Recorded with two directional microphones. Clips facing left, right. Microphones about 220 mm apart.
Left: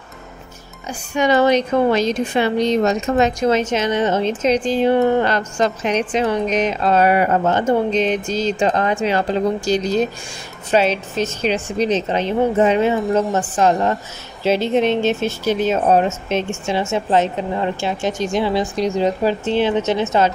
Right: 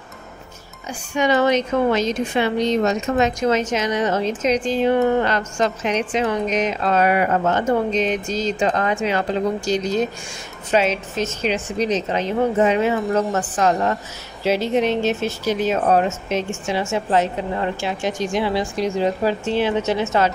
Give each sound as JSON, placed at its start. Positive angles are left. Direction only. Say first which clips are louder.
{"t": 1.1, "sound": "a woman's voice", "louder": "left 2 dB", "side_deg": 35}